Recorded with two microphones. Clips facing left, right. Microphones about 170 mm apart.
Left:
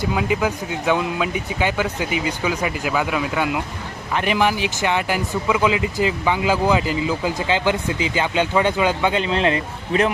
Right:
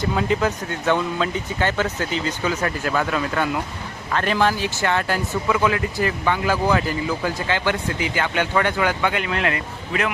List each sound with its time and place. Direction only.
0.0 s speech: 10° left (ahead or behind); by 10.1 s 30° left (ahead or behind)